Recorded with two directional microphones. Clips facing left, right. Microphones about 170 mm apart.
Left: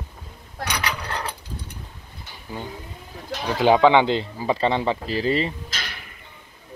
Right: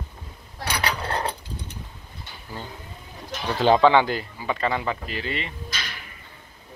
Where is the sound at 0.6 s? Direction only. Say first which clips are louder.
Right 2 dB; 30° right (ahead or behind).